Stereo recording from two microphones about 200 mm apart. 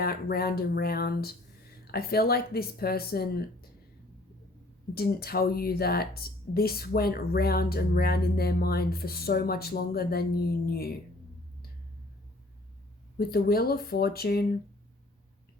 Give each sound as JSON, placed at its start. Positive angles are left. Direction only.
{"t": 0.0, "sound": "speech", "side_deg": 50}
{"t": 4.9, "sound": "speech", "side_deg": 50}
{"t": 13.1, "sound": "speech", "side_deg": 50}